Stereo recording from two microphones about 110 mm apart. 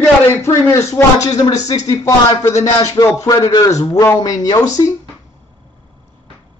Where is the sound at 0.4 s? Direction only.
25° left (ahead or behind).